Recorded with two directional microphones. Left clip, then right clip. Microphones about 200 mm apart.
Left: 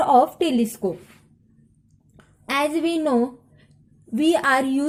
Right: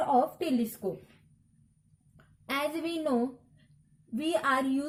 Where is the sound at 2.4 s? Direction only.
30° left (ahead or behind).